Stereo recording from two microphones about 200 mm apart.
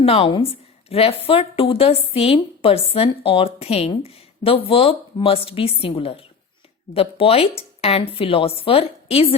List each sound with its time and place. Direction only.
0.0 s a woman's voice: 30° left (ahead or behind)